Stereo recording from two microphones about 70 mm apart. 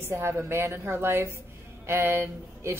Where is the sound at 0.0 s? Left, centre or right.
Right.